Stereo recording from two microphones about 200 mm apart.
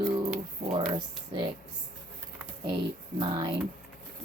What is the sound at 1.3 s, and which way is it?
Speech, 25° right (ahead or behind).